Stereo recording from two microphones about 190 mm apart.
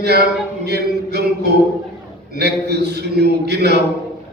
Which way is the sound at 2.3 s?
60° right (ahead or behind).